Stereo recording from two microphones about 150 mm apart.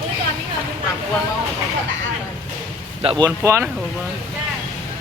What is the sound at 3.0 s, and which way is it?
Speech, 30° right (ahead or behind).